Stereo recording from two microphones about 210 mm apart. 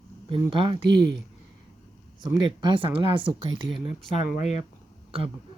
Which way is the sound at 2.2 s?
20° right (ahead or behind).